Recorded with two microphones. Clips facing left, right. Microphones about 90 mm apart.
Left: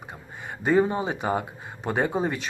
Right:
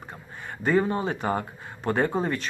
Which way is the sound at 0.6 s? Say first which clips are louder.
Left 2 dB; 15° left (ahead or behind).